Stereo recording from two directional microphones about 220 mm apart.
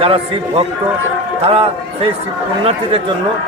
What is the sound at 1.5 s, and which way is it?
Speech, 25° right (ahead or behind).